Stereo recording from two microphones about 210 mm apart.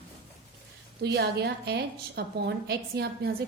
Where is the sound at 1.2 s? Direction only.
50° right (ahead or behind).